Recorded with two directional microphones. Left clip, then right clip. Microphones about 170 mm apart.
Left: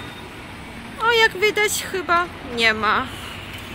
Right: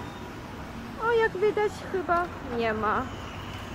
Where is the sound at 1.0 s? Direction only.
10° left (ahead or behind).